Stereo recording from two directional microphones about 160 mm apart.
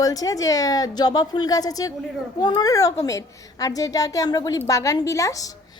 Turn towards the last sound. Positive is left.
turn(degrees=20)  # may be behind; listen again after turning